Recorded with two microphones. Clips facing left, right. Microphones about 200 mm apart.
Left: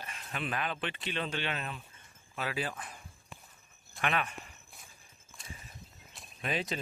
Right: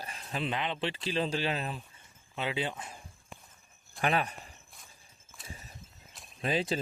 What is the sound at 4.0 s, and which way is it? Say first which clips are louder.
Speech: right 3 dB; 35° right (ahead or behind).